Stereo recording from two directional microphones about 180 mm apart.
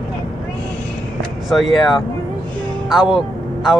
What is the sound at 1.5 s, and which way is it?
Speech, centre (ahead or behind).